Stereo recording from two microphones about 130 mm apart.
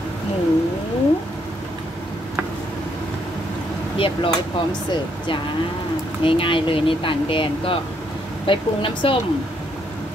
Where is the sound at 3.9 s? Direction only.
45° left (ahead or behind).